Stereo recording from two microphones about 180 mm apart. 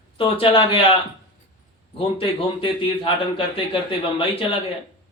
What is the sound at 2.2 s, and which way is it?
Speech, 30° left (ahead or behind).